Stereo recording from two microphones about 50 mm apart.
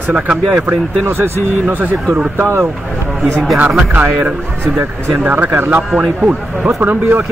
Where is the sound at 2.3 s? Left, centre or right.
Right.